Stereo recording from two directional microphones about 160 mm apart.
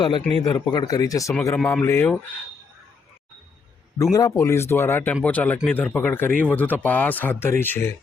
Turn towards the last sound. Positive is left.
turn(degrees=15)  # may be behind; listen again after turning